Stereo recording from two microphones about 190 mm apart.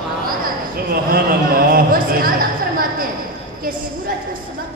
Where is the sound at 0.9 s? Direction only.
50° right (ahead or behind).